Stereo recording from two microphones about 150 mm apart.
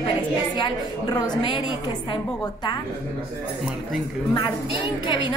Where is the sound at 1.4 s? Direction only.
35° left (ahead or behind).